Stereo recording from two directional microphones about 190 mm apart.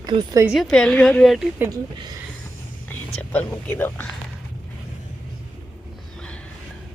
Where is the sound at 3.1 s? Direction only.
5° left (ahead or behind).